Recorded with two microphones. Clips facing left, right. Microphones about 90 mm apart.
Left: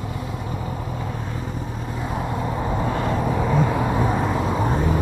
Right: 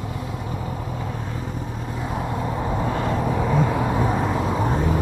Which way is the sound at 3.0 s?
30° left (ahead or behind).